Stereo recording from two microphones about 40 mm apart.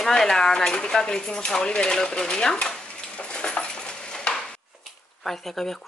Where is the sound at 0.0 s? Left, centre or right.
Centre.